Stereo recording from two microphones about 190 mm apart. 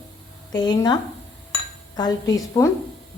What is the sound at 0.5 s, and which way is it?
Cutlery, 20° left (ahead or behind).